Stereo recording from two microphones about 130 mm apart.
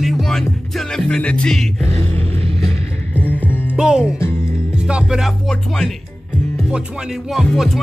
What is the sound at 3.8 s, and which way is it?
Music, 5° right (ahead or behind).